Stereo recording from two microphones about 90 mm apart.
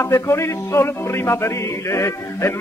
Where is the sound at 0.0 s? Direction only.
30° left (ahead or behind).